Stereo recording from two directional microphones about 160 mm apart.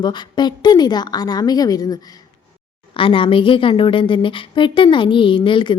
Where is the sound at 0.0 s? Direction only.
25° left (ahead or behind).